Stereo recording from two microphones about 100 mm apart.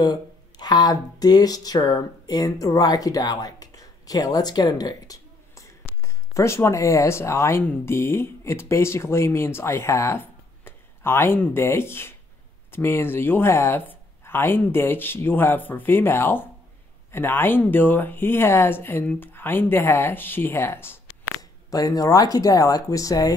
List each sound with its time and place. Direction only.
0.0 s speech: 45° left (ahead or behind); by 21.3 s 25° left (ahead or behind)
21.4 s speech: 40° left (ahead or behind)